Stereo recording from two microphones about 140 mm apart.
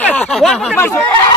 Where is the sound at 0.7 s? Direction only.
15° left (ahead or behind).